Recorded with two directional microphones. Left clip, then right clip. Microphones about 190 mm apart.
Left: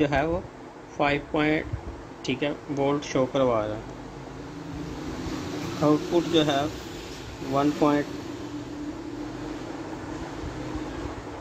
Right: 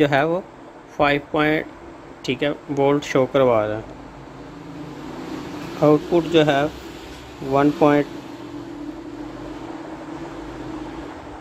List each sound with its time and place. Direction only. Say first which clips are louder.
0.0 s speech: right 6 dB; 25° right (ahead or behind)
5.8 s speech: right 7 dB; 35° right (ahead or behind)